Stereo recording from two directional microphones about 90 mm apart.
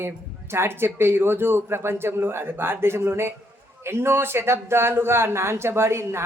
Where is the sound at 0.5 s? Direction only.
25° right (ahead or behind).